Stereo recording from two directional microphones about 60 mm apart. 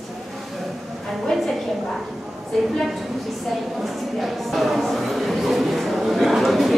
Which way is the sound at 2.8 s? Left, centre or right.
Centre.